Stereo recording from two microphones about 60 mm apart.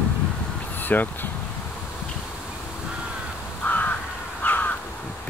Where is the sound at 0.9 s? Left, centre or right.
Left.